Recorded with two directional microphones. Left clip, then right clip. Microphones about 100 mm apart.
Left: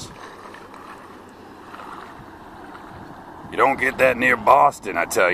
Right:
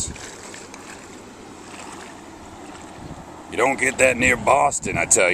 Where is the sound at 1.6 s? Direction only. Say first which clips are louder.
Left 2 dB; 25° right (ahead or behind).